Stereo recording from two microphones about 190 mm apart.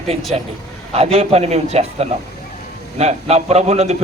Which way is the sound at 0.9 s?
30° right (ahead or behind).